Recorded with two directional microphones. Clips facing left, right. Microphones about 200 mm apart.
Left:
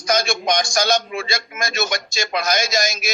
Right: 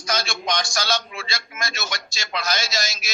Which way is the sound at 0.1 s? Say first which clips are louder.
Left 6 dB; 50° left (ahead or behind).